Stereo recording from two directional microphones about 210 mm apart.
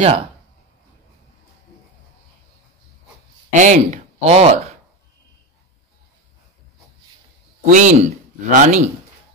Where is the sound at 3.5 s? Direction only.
35° right (ahead or behind).